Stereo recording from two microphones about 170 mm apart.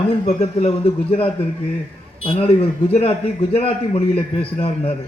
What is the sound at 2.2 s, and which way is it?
A man's voice, 35° left (ahead or behind).